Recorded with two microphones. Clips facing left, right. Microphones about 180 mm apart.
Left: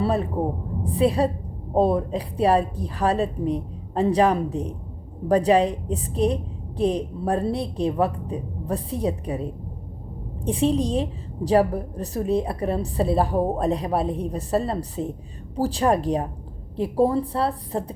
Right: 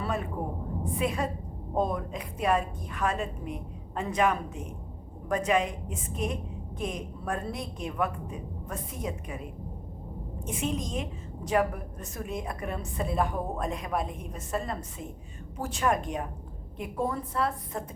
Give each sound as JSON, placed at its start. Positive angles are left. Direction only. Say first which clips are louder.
{"t": 0.0, "sound": "a woman's voice", "louder": "left 9 dB", "side_deg": 35}